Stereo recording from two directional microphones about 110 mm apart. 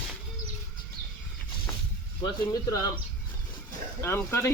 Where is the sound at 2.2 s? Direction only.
35° left (ahead or behind).